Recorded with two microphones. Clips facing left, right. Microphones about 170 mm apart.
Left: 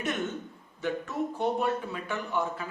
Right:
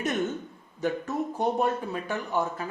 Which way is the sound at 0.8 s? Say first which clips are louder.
Right 2 dB; 40° right (ahead or behind).